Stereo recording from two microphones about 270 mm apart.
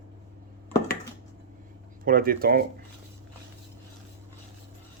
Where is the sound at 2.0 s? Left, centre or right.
Right.